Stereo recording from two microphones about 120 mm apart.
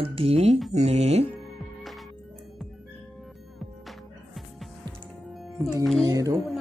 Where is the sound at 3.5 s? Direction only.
Centre (ahead or behind).